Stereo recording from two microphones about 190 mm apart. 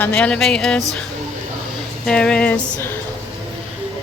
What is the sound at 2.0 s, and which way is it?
Speech, 5° left (ahead or behind).